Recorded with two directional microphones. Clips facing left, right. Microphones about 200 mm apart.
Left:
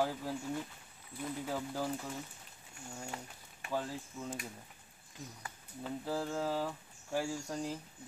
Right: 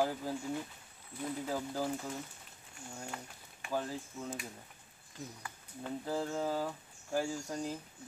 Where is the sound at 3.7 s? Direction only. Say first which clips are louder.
Right 1 dB; centre (ahead or behind).